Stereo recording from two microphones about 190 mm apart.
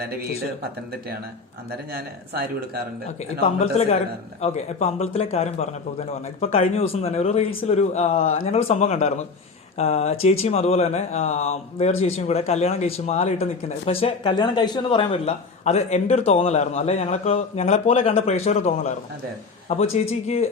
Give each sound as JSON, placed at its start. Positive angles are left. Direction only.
{"t": 0.0, "sound": "speech", "side_deg": -55}
{"t": 1.9, "sound": "speech", "side_deg": -55}
{"t": 3.6, "sound": "speech", "side_deg": 35}